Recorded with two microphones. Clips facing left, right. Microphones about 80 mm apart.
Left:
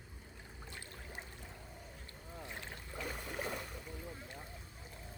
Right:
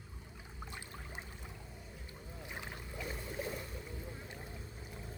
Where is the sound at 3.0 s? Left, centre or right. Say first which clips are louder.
Even; left.